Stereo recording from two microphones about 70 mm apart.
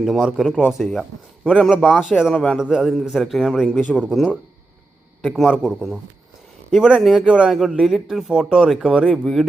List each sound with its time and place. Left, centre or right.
0.0 s speech: centre
2.3 s speech: centre
2.6 s speech: centre
5.3 s speech: centre
6.7 s speech: centre